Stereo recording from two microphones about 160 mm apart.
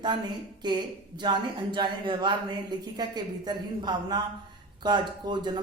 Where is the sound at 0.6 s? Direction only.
25° right (ahead or behind).